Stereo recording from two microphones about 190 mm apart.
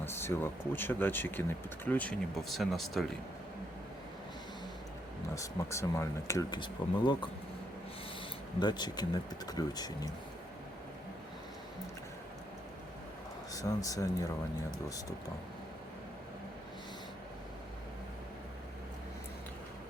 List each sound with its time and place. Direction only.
0.0 s a sound: 10° left (ahead or behind)
0.7 s speech: 10° left (ahead or behind)
5.3 s speech: 15° left (ahead or behind)
8.5 s speech: 20° left (ahead or behind)
13.5 s speech: 20° left (ahead or behind)